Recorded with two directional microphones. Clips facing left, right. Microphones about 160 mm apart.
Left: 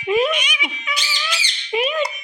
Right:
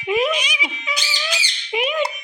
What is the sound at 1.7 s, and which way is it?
Squawk, 15° right (ahead or behind).